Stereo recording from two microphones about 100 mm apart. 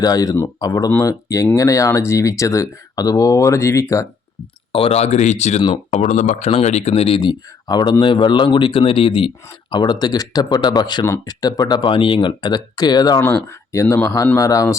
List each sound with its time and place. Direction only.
0.0 s speech: 40° left (ahead or behind)
4.7 s speech: 80° left; by 13.2 s 40° left (ahead or behind)
13.7 s speech: 25° left (ahead or behind)